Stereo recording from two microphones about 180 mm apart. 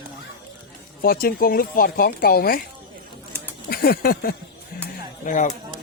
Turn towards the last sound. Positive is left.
turn(degrees=45)  # may be behind; listen again after turning